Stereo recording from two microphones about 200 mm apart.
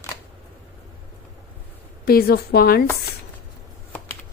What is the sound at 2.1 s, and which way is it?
Speech, 50° left (ahead or behind).